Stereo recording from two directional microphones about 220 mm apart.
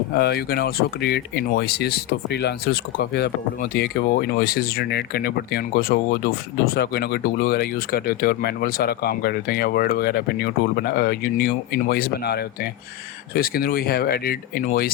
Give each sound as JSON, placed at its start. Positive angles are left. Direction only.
{"t": 0.2, "sound": "speech", "side_deg": 45}